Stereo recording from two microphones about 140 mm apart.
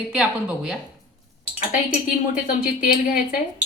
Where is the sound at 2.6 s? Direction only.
90° left.